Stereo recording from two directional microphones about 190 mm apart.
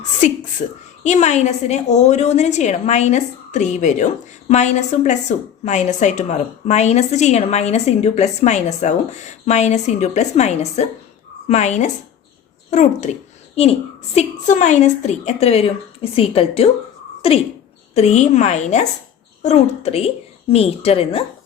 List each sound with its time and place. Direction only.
0.6 s a woman's voice: 45° left (ahead or behind)
14.2 s a woman's voice: 40° left (ahead or behind)